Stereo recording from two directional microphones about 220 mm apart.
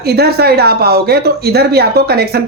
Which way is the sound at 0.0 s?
45° right (ahead or behind).